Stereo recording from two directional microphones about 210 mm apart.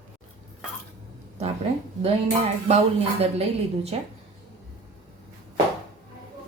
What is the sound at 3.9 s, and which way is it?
Speech, 30° right (ahead or behind).